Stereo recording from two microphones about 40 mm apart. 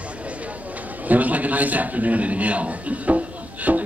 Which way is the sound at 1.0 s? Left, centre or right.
Right.